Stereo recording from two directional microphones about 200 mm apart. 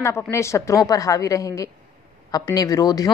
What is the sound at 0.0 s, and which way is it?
A woman's voice, 15° left (ahead or behind).